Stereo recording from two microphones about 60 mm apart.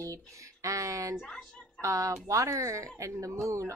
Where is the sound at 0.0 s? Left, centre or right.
Right.